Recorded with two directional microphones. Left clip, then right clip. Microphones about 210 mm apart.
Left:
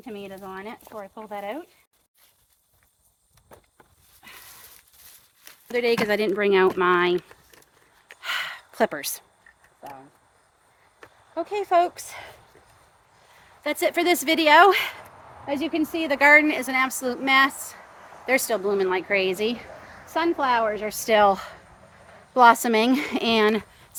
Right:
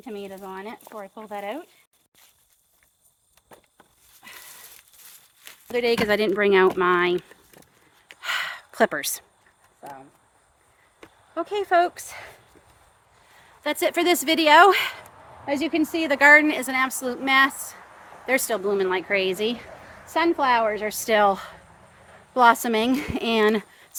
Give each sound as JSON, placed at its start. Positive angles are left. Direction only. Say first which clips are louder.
{"t": 0.0, "sound": "speech", "louder": "right 1 dB", "side_deg": -25}
{"t": 3.5, "sound": "walk", "louder": "even", "side_deg": -40}
{"t": 5.7, "sound": "speech", "louder": "right 1 dB", "side_deg": -10}
{"t": 8.0, "sound": "gasp", "louder": "right 1 dB", "side_deg": -15}
{"t": 11.3, "sound": "speech", "louder": "even", "side_deg": -15}
{"t": 13.6, "sound": "a woman's voice", "louder": "even", "side_deg": -10}